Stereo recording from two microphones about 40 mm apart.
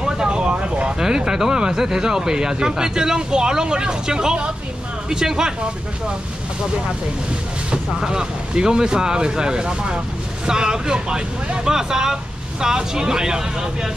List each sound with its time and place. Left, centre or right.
0.0 s vehicle: centre
0.9 s speech: centre
7.7 s speech: centre